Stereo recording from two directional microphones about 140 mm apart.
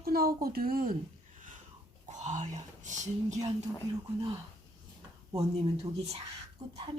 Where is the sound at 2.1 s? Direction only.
60° right (ahead or behind).